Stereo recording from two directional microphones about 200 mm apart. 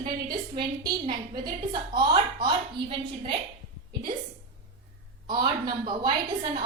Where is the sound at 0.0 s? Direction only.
20° right (ahead or behind).